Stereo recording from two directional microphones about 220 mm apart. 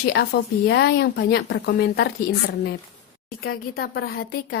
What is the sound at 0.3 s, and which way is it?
A woman's voice, 50° left (ahead or behind).